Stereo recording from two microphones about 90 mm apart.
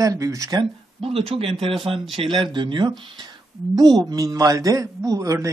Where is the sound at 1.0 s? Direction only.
90° right; by 2.8 s 60° right (ahead or behind).